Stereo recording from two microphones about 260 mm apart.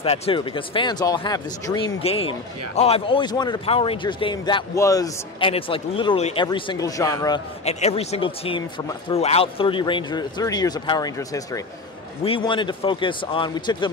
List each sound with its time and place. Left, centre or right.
0.0 s a man's voice: left